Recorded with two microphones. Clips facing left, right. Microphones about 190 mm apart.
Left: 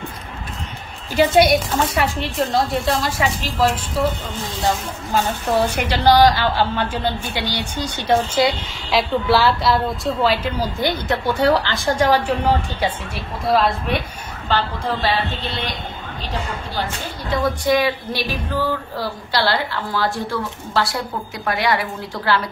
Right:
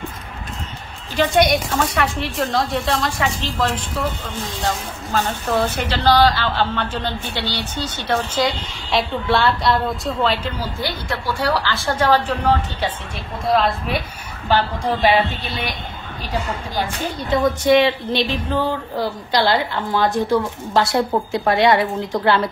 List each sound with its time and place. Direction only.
1.1 s speech: 5° left (ahead or behind)
4.6 s a woman's voice: 15° left (ahead or behind)
8.9 s a woman's voice: centre (ahead or behind)
13.5 s speech: centre (ahead or behind)
14.5 s a woman's voice: 15° right (ahead or behind)
16.7 s a woman's voice: 15° right (ahead or behind)